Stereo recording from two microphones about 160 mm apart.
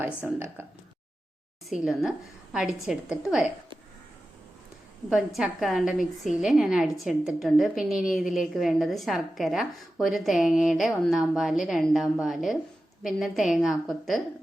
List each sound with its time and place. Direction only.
0.3 s speech: 15° right (ahead or behind)
1.7 s a woman's voice: centre (ahead or behind)
5.0 s a woman's voice: centre (ahead or behind)